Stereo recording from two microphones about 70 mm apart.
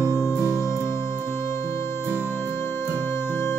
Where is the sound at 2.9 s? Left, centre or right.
Left.